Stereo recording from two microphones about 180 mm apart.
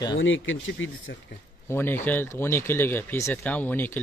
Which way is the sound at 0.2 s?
90° left.